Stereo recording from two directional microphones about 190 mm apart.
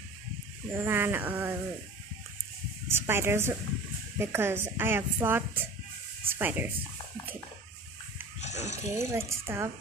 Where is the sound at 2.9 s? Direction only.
10° right (ahead or behind).